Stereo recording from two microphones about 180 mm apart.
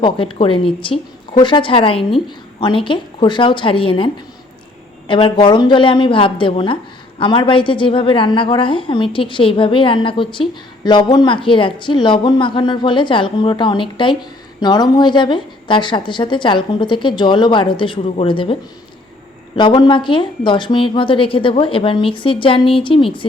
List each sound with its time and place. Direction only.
0.0 s a woman's voice: 30° left (ahead or behind)
19.5 s a woman's voice: 25° left (ahead or behind)